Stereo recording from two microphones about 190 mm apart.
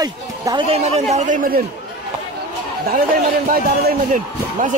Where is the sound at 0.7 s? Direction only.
35° right (ahead or behind).